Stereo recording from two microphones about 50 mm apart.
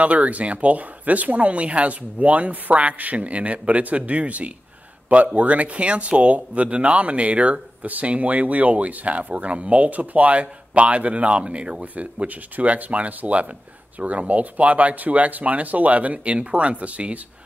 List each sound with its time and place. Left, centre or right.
0.0 s speech: right